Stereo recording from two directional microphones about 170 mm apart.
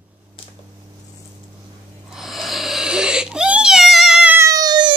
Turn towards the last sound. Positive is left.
turn(degrees=-25)  # may be behind; listen again after turning